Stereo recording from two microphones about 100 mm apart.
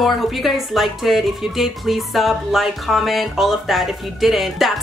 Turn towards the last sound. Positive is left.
turn(degrees=0)  # may be behind; listen again after turning